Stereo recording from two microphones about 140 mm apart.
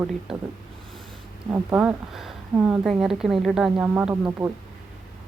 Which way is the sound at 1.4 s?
15° right (ahead or behind).